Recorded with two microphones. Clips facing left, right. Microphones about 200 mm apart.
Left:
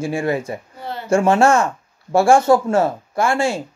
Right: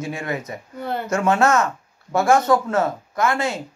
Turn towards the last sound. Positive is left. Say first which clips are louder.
# left 3 dB
turn(degrees=30)  # may be behind; listen again after turning